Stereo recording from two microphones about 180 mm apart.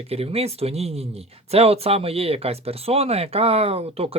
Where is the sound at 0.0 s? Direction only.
35° right (ahead or behind).